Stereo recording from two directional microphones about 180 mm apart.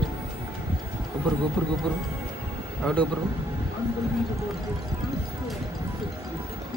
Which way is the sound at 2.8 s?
5° left (ahead or behind).